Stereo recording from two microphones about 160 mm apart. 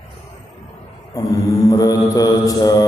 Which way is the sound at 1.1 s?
20° left (ahead or behind).